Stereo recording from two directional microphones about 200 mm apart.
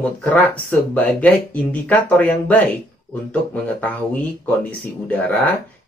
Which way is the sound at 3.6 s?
10° left (ahead or behind).